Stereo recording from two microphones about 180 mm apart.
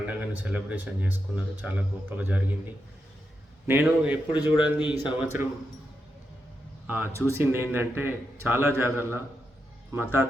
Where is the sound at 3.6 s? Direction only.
10° right (ahead or behind).